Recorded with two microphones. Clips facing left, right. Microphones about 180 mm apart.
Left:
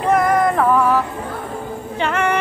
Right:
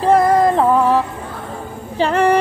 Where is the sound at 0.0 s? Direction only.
30° right (ahead or behind).